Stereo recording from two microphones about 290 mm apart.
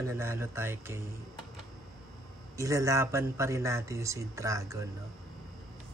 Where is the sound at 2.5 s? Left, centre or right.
Centre.